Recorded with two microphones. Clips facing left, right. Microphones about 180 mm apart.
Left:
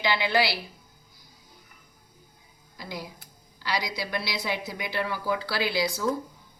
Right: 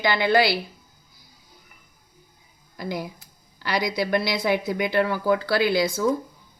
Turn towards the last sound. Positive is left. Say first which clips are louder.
# right 6 dB
turn(degrees=-50)  # may be behind; listen again after turning